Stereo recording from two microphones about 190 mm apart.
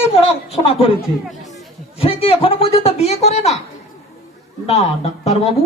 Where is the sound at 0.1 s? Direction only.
30° left (ahead or behind).